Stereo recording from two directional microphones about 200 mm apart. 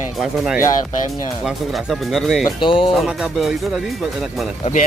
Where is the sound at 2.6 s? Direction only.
25° left (ahead or behind).